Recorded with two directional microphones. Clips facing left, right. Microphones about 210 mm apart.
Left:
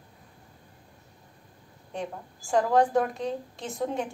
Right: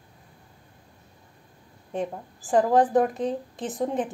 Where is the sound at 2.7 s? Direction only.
20° right (ahead or behind).